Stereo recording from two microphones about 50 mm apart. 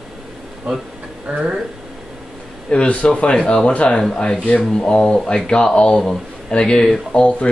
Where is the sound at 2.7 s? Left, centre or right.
Left.